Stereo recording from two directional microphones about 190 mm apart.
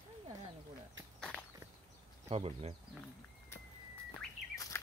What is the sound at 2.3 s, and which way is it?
Speech, 30° right (ahead or behind).